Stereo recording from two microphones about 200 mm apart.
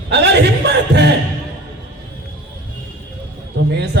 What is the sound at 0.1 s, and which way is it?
Speech, 55° right (ahead or behind).